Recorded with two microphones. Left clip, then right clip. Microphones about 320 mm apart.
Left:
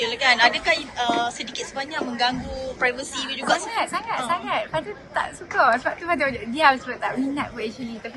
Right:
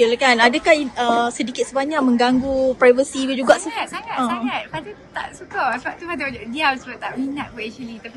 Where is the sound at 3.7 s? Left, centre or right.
Centre.